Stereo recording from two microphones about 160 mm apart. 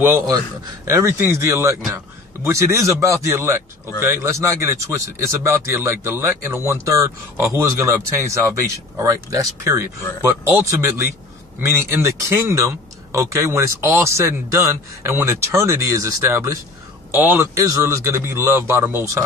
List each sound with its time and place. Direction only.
0.0 s speech: 20° right (ahead or behind)